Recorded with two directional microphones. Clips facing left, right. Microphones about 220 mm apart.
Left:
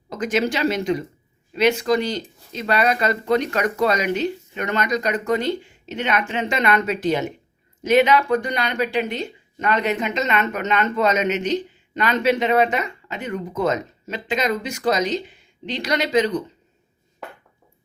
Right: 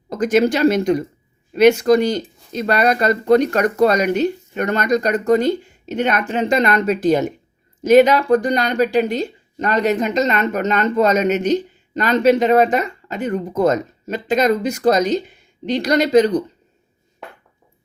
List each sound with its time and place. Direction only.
0.1 s speech: 45° right (ahead or behind)